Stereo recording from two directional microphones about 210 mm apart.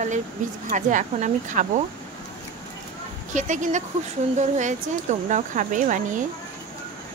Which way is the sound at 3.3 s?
35° right (ahead or behind).